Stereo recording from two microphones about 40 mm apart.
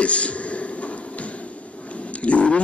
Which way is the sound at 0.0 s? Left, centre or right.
Left.